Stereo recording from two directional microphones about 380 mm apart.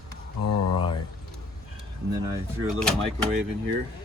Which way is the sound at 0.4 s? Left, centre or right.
Left.